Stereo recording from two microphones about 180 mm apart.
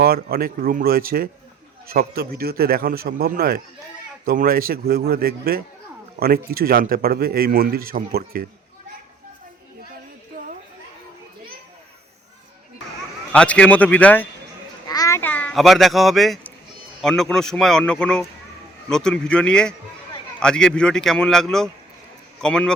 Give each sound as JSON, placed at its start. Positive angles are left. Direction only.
{"t": 0.0, "sound": "speech", "side_deg": -60}
{"t": 10.3, "sound": "chatter", "side_deg": -55}
{"t": 13.3, "sound": "a man's voice", "side_deg": 5}
{"t": 14.8, "sound": "a sound", "side_deg": 20}
{"t": 17.0, "sound": "a man's voice", "side_deg": 5}